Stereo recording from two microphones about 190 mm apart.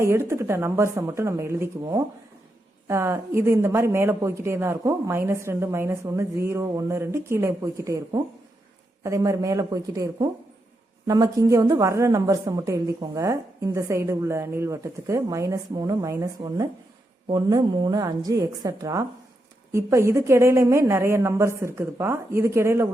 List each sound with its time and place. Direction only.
0.0 s a woman's voice: 15° right (ahead or behind)